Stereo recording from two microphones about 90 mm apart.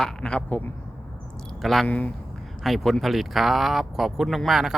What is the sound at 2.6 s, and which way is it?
Speech, centre (ahead or behind).